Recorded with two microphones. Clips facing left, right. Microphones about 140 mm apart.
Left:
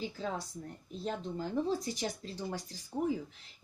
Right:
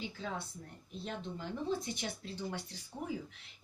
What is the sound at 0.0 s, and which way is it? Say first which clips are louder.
Speech: left 4 dB; 40° left (ahead or behind).